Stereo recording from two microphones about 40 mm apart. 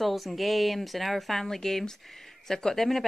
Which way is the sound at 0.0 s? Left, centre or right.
Centre.